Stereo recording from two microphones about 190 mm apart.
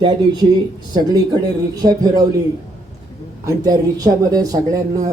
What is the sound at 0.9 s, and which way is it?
Speech, 20° right (ahead or behind).